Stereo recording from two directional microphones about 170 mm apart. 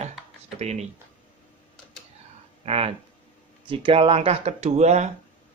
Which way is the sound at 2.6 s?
35° right (ahead or behind).